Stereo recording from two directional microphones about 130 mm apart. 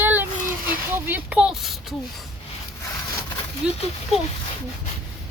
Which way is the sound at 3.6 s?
5° right (ahead or behind).